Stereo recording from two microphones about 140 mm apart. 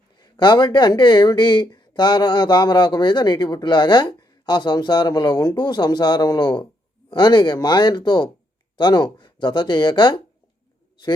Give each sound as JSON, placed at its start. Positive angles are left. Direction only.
{"t": 0.2, "sound": "speech", "side_deg": 35}